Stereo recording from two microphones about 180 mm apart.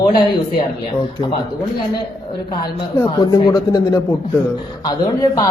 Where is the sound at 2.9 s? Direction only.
20° left (ahead or behind).